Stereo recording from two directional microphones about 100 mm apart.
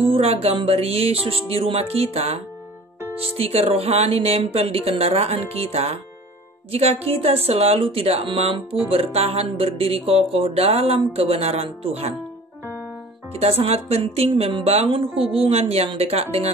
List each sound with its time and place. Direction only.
0.0 s speech: 75° right (ahead or behind)
13.3 s speech: 90° right